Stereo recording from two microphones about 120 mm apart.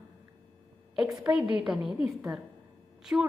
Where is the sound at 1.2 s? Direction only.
10° right (ahead or behind).